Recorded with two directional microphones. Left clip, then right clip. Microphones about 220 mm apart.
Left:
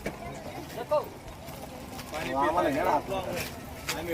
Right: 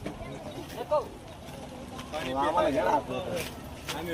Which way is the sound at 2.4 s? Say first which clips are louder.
Left 1 dB; 50° right (ahead or behind).